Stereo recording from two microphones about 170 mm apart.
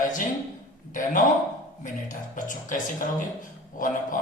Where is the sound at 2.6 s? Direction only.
50° left (ahead or behind).